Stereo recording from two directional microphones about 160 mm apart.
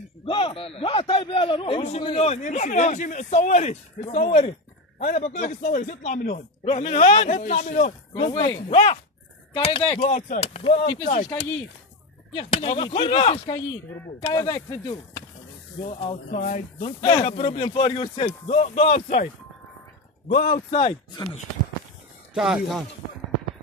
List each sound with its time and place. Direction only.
0.2 s a man's voice: 35° left (ahead or behind)
8.1 s a man's voice: 35° left (ahead or behind)
10.0 s a man's voice: 50° left (ahead or behind); by 11.1 s 35° left (ahead or behind)
12.4 s a man's voice: 35° left (ahead or behind)
14.2 s speech: 25° left (ahead or behind)
16.3 s speech: 55° left (ahead or behind)
17.0 s a man's voice: 30° left (ahead or behind)
20.2 s speech: 65° left (ahead or behind)
20.7 s a man's voice: 35° left (ahead or behind)
22.3 s a man's voice: 5° right (ahead or behind)